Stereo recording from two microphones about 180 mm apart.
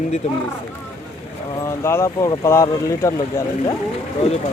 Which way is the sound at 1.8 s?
15° left (ahead or behind).